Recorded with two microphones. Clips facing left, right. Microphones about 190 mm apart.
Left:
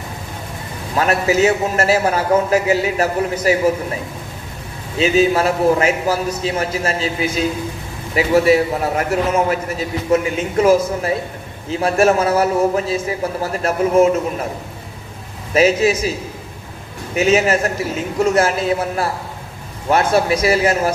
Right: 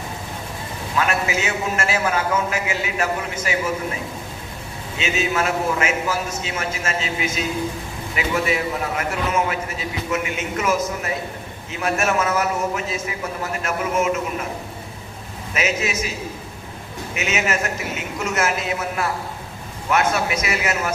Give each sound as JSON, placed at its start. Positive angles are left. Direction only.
{"t": 0.9, "sound": "a man's voice", "side_deg": 35}
{"t": 4.9, "sound": "a man's voice", "side_deg": 35}
{"t": 15.5, "sound": "a man's voice", "side_deg": 35}
{"t": 17.2, "sound": "a man's voice", "side_deg": 35}